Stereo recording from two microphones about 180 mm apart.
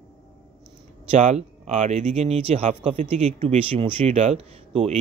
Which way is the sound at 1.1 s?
40° right (ahead or behind).